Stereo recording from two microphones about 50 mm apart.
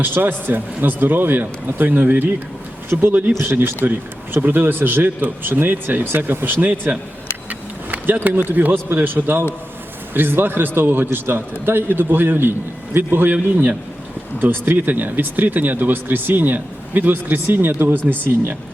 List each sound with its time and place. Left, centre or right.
0.0 s speech: right
3.4 s a man's voice: right
4.4 s speech: right
7.9 s a sound: right
8.4 s a man's voice: right
14.4 s a man's voice: right